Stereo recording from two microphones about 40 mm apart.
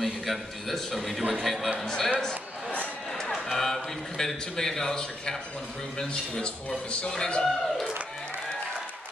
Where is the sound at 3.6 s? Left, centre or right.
Centre.